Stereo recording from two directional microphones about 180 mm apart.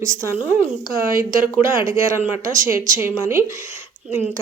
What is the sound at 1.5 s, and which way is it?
A woman's voice, 15° right (ahead or behind).